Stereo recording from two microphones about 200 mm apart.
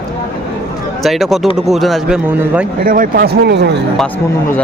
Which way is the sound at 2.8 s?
45° right (ahead or behind).